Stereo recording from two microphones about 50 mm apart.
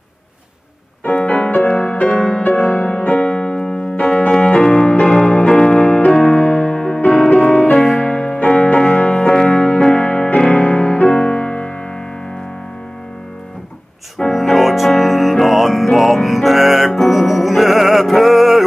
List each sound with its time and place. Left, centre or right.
1.0 s music: left
7.8 s music: centre
14.2 s music: centre